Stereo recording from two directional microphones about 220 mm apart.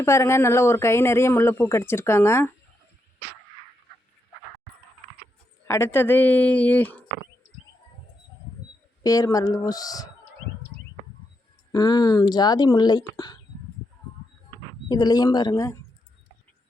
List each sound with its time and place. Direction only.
0.0 s speech: 10° left (ahead or behind)
5.6 s speech: 10° left (ahead or behind)
9.0 s speech: 15° left (ahead or behind)
11.7 s speech: 20° left (ahead or behind)
14.8 s speech: 20° left (ahead or behind)